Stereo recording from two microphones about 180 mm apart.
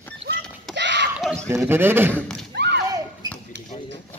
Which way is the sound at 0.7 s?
75° right (ahead or behind).